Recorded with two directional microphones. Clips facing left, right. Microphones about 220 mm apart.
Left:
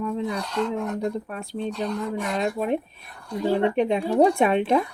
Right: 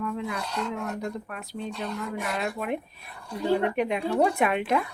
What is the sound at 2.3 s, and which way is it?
Speech, 35° left (ahead or behind).